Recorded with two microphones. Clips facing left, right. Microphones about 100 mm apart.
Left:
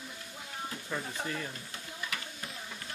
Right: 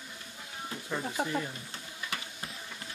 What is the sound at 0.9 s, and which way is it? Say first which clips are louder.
Speech: right 5 dB; 10° right (ahead or behind).